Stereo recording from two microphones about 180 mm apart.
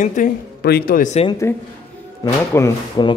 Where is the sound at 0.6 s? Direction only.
60° left (ahead or behind); by 1.3 s 40° left (ahead or behind).